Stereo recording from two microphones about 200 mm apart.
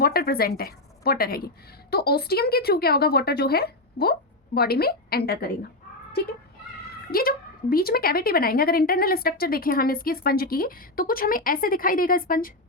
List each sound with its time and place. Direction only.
0.0 s a woman's voice: 50° left (ahead or behind)
7.1 s a woman's voice: 45° left (ahead or behind)